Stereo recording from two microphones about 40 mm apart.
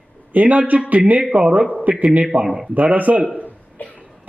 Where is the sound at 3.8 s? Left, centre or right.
Left.